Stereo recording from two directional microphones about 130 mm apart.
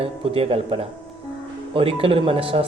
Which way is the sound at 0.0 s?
50° right (ahead or behind).